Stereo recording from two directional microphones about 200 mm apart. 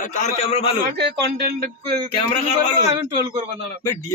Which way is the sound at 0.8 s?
55° right (ahead or behind).